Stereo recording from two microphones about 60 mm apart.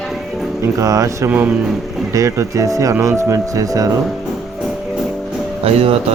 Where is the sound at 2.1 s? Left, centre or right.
Right.